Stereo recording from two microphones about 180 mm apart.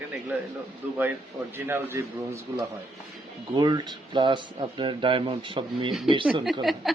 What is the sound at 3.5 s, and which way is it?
Speech, 25° right (ahead or behind).